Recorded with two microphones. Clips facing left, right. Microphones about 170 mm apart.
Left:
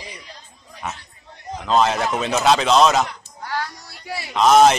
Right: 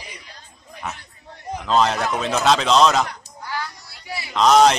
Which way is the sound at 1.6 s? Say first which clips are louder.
Left 1 dB; 5° left (ahead or behind).